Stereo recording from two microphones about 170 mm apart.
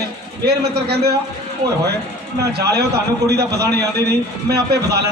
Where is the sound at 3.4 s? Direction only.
20° right (ahead or behind).